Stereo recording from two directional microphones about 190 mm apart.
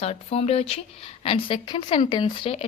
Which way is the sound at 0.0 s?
30° left (ahead or behind).